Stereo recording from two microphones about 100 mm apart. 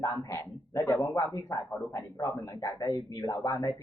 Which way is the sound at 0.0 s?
30° left (ahead or behind).